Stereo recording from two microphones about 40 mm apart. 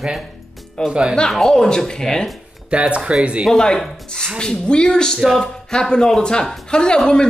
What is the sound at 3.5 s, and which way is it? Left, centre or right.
Speech, centre.